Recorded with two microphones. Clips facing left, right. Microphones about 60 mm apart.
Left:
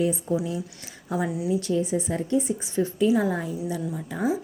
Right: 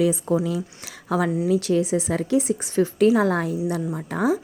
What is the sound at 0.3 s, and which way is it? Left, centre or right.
Speech, right.